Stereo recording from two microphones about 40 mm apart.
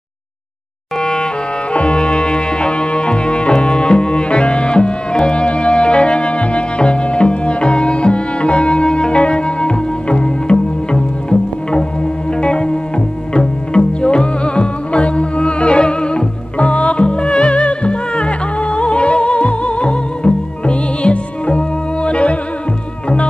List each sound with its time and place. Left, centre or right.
1.7 s music: left